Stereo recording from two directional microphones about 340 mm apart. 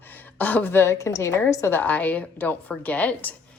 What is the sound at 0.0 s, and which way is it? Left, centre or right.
A woman's voice, centre.